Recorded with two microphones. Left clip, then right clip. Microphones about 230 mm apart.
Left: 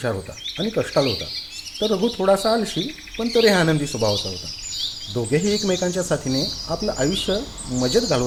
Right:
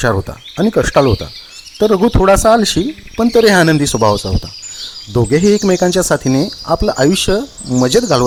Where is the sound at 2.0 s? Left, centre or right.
Right.